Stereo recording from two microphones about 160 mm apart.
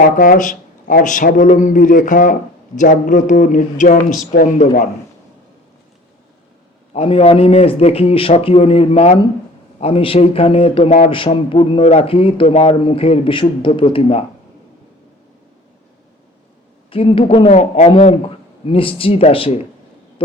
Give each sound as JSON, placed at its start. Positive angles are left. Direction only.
{"t": 0.2, "sound": "a man's voice", "side_deg": 55}
{"t": 6.9, "sound": "a man's voice", "side_deg": 35}
{"t": 16.9, "sound": "a man's voice", "side_deg": 35}